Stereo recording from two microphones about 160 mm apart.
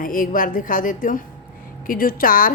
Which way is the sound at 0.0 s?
60° left (ahead or behind).